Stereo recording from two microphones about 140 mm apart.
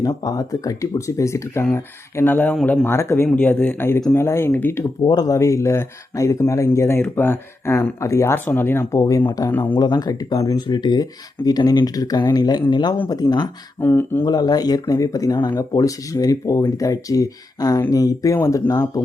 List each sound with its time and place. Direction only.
0.2 s speech: 25° left (ahead or behind)
5.0 s speech: 25° left (ahead or behind)
9.5 s speech: 15° left (ahead or behind)
9.7 s speech: 30° left (ahead or behind)
13.7 s speech: 15° left (ahead or behind)
14.3 s speech: 30° left (ahead or behind)